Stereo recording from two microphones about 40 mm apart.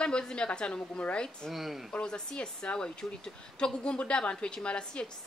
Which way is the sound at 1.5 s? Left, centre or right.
Centre.